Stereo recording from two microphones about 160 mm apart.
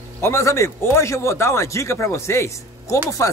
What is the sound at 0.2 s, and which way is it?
Speech, 15° left (ahead or behind).